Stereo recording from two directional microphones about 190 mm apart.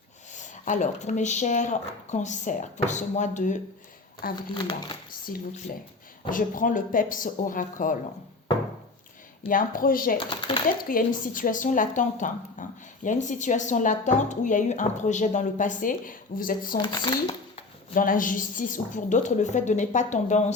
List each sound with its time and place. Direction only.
0.3 s a woman's voice: 40° left (ahead or behind)
4.5 s speech: 25° left (ahead or behind)
5.3 s speech: 45° left (ahead or behind)
9.5 s speech: 45° left (ahead or behind)
10.2 s a sound: 25° left (ahead or behind)
10.8 s a woman's voice: 45° left (ahead or behind)
16.7 s speech: 25° left (ahead or behind)
17.9 s a woman's voice: 45° left (ahead or behind)